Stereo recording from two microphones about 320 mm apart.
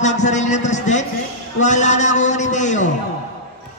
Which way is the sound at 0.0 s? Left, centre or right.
Left.